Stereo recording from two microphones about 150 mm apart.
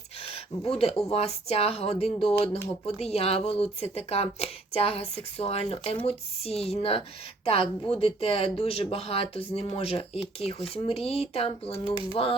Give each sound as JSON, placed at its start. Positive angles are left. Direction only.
{"t": 0.2, "sound": "speech", "side_deg": 40}